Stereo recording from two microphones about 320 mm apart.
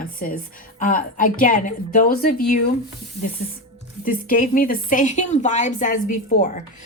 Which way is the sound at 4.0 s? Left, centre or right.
Left.